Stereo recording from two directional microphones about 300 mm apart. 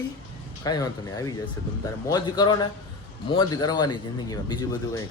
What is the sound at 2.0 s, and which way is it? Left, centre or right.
A man's voice, centre.